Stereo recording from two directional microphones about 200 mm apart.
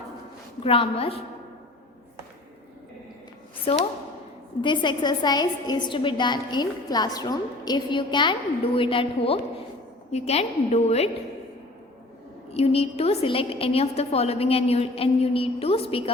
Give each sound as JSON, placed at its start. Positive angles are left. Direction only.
{"t": 0.6, "sound": "a woman's voice", "side_deg": 30}
{"t": 4.6, "sound": "a woman's voice", "side_deg": 25}
{"t": 12.5, "sound": "a woman's voice", "side_deg": 30}